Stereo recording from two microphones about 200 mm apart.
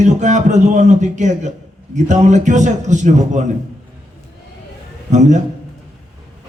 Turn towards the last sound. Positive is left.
turn(degrees=-35)  # may be behind; listen again after turning